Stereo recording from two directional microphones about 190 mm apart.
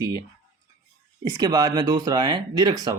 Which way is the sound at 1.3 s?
20° right (ahead or behind).